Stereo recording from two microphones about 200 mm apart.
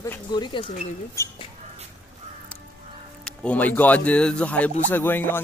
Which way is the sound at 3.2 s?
5° left (ahead or behind).